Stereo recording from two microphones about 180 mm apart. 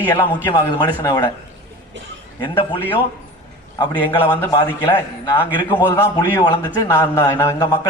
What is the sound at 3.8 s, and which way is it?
Speech, 25° left (ahead or behind).